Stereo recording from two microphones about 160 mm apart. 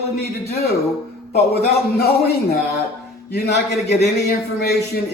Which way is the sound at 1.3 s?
80° left.